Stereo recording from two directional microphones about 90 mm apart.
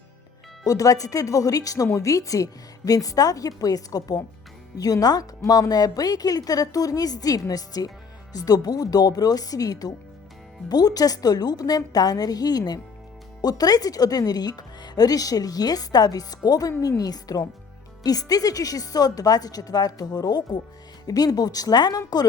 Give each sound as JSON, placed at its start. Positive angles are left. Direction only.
{"t": 0.6, "sound": "speech", "side_deg": 40}